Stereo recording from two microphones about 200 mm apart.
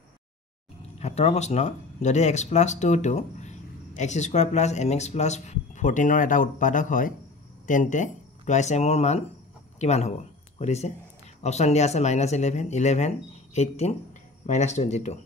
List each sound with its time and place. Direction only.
0.9 s speech: 30° left (ahead or behind)